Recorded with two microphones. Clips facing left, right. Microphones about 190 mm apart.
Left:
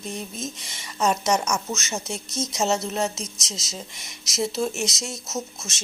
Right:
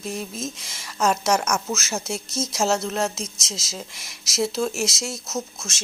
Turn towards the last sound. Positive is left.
turn(degrees=0)  # may be behind; listen again after turning